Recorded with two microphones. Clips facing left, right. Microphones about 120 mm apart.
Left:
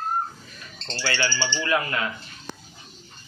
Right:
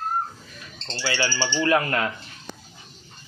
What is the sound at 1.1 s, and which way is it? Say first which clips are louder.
Speech: right 4 dB; 40° right (ahead or behind).